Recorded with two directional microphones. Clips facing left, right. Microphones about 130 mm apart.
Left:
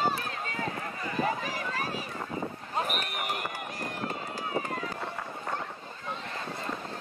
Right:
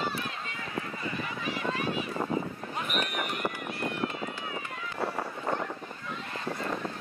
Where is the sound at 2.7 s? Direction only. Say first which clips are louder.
Even; 35° left (ahead or behind).